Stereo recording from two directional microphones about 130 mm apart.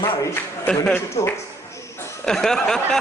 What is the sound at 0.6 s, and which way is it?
Speech, 10° left (ahead or behind).